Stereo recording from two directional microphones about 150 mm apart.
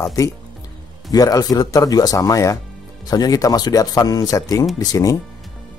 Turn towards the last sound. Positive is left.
turn(degrees=25)  # may be behind; listen again after turning